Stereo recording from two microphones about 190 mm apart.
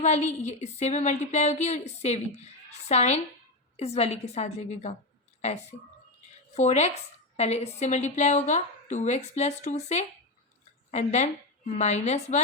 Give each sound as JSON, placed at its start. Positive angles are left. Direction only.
{"t": 0.0, "sound": "a woman's voice", "side_deg": 35}